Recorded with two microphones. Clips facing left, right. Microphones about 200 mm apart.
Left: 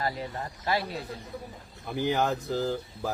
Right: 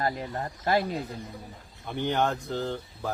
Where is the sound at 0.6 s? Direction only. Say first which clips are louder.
Right 4 dB; 45° right (ahead or behind).